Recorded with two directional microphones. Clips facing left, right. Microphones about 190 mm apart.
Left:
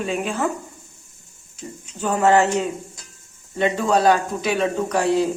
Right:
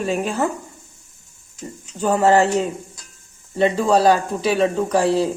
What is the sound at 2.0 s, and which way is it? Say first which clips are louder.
Speech: right 2 dB; 35° right (ahead or behind).